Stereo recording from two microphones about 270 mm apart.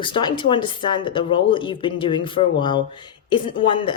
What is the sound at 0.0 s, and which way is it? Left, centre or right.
Speech, centre.